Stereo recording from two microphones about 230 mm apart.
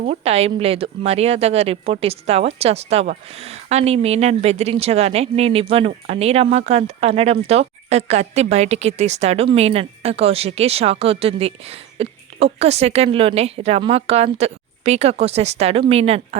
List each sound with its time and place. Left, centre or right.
0.0 s speech: right